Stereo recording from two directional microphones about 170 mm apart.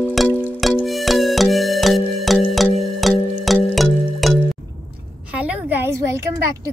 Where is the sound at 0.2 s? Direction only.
Centre (ahead or behind).